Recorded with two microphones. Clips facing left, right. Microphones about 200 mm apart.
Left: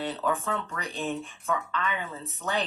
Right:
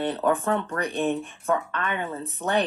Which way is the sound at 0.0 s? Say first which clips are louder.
Right 6 dB; 55° right (ahead or behind).